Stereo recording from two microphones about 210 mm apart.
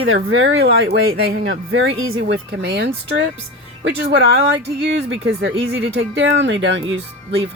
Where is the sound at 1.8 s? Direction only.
70° right (ahead or behind).